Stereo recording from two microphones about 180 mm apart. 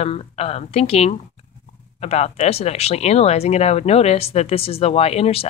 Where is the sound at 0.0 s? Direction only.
35° left (ahead or behind).